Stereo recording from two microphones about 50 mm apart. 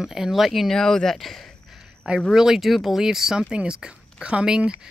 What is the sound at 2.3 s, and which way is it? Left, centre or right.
Speech, centre.